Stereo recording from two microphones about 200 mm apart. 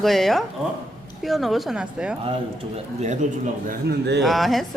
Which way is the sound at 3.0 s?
35° right (ahead or behind).